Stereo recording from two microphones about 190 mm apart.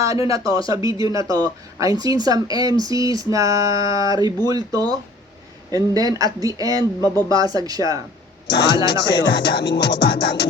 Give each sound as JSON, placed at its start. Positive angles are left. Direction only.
{"t": 0.0, "sound": "speech", "side_deg": -15}
{"t": 8.4, "sound": "a man's voice", "side_deg": 65}
{"t": 9.0, "sound": "music", "side_deg": 60}